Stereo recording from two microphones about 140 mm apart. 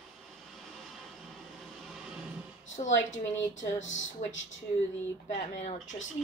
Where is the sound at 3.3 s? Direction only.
20° left (ahead or behind).